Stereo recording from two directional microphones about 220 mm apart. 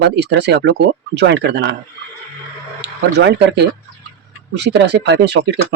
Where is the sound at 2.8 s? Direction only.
50° right (ahead or behind).